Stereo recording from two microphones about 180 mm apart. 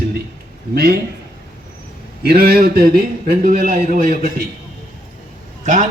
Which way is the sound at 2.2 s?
60° right (ahead or behind).